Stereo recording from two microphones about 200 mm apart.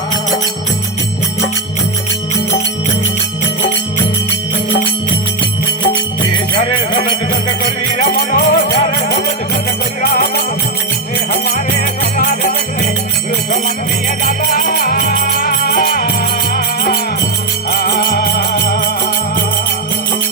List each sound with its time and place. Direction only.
8.0 s music: 45° left (ahead or behind)
10.0 s music: 50° left (ahead or behind)
14.3 s music: 45° left (ahead or behind)